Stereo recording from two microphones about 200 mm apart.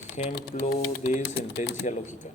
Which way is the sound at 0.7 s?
45° left (ahead or behind).